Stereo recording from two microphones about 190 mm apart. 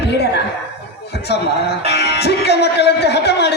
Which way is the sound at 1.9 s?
60° left (ahead or behind).